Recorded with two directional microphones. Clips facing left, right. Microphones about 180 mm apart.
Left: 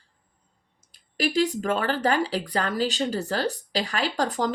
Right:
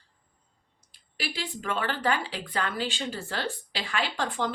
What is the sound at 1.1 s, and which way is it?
A woman's voice, 40° left (ahead or behind).